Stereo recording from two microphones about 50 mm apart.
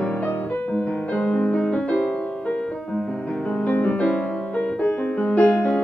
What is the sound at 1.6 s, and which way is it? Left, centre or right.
Music, centre.